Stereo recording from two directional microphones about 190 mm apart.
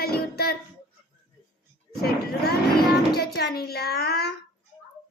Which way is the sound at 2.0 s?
55° left (ahead or behind).